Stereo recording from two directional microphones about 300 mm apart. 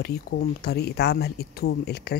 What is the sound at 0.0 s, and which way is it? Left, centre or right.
Speech, left.